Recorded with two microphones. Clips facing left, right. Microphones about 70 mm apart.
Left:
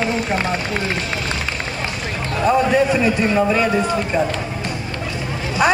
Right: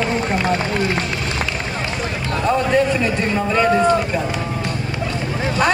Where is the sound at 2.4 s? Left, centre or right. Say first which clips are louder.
Left 2 dB; centre.